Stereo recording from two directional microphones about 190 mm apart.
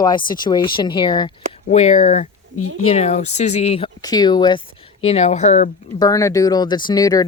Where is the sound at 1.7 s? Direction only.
35° left (ahead or behind).